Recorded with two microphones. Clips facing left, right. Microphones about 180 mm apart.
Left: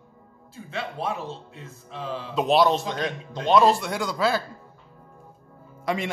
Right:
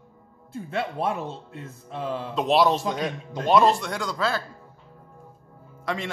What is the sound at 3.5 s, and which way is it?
Speech, centre (ahead or behind).